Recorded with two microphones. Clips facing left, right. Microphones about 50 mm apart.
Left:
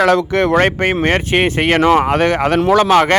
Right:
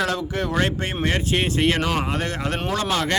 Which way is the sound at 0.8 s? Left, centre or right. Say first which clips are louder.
Left 9 dB; left.